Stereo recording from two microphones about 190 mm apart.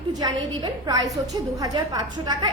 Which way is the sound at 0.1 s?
20° right (ahead or behind).